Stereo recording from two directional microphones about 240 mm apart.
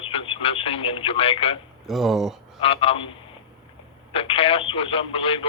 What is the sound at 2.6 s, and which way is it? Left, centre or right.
Speech, left.